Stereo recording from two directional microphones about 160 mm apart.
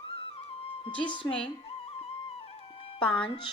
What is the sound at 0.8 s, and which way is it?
Speech, 30° left (ahead or behind).